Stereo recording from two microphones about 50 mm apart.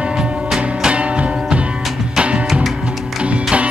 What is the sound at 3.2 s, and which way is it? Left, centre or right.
Music, right.